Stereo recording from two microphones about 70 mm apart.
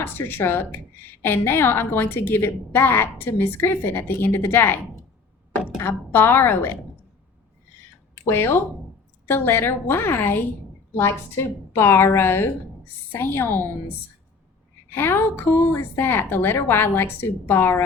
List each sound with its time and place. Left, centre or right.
0.0 s a woman's voice: left
8.1 s a woman's voice: left
14.8 s a woman's voice: left